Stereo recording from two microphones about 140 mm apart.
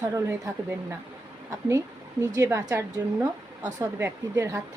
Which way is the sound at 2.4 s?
20° right (ahead or behind).